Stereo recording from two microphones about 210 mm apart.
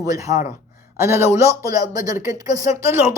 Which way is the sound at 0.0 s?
15° right (ahead or behind).